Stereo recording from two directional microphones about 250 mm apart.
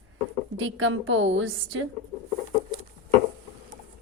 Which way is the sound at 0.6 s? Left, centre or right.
Right.